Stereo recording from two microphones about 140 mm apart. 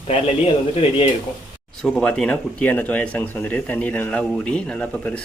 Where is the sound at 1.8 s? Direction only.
5° left (ahead or behind).